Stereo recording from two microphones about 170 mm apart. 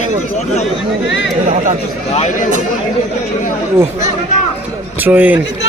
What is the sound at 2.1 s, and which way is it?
Speech, 40° left (ahead or behind).